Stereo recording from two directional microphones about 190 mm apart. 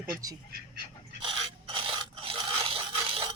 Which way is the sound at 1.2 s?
25° right (ahead or behind).